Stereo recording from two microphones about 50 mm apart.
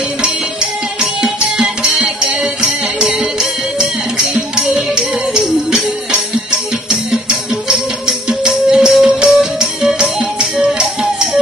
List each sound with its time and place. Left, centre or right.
1.2 s music: centre